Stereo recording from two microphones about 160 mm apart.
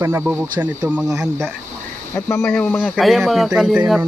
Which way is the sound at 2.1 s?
15° left (ahead or behind).